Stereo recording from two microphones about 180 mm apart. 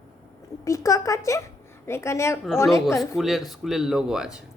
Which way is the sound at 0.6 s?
15° left (ahead or behind).